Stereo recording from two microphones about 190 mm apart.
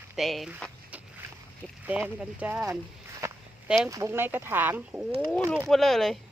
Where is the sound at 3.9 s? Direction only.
15° right (ahead or behind).